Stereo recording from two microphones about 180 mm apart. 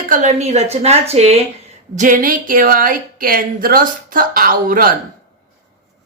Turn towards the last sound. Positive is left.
turn(degrees=-55)  # may be behind; listen again after turning